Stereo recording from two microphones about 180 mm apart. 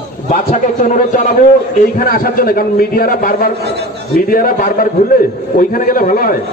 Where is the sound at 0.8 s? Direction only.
45° left (ahead or behind).